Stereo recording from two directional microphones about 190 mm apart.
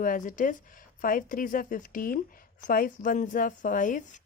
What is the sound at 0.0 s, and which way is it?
A woman's voice, 45° left (ahead or behind).